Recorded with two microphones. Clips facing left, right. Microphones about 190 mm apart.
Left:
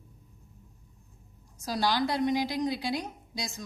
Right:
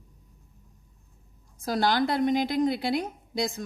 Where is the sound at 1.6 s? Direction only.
55° right (ahead or behind).